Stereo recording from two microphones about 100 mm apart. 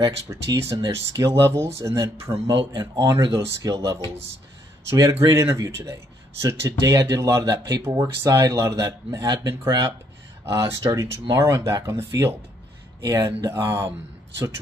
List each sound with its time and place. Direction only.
0.3 s speech: 30° right (ahead or behind)
2.5 s speech: 50° right (ahead or behind)
3.3 s speech: 35° right (ahead or behind)
5.1 s speech: 25° right (ahead or behind)
10.4 s speech: 30° right (ahead or behind)